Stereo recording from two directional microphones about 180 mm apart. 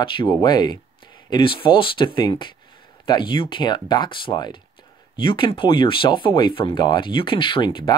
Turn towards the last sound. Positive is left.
turn(degrees=25)  # may be behind; listen again after turning